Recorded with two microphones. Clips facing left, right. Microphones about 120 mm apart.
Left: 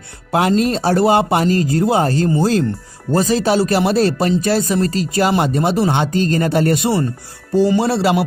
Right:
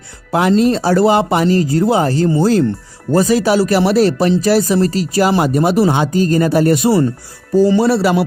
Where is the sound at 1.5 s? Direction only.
25° right (ahead or behind).